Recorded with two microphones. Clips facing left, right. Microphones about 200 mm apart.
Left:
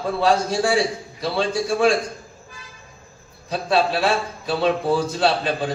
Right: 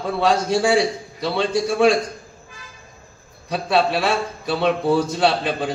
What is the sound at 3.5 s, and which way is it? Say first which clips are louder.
A man's voice: right 1 dB; 65° right (ahead or behind).